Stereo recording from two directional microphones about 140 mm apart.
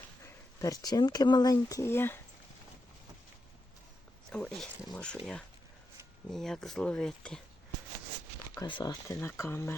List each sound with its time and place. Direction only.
0.6 s speech: 25° left (ahead or behind)
4.3 s speech: 5° left (ahead or behind)
8.6 s speech: 30° left (ahead or behind)
9.1 s speech: 15° left (ahead or behind)